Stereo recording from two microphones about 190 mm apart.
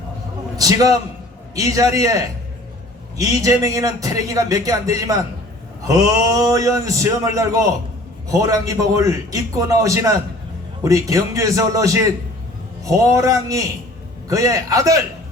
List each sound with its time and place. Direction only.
0.5 s a man's voice: 20° right (ahead or behind)